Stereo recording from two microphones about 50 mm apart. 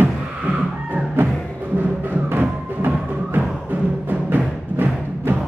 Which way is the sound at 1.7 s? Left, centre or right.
Right.